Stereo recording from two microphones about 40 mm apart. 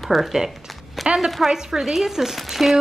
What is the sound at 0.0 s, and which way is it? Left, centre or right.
Speech, centre.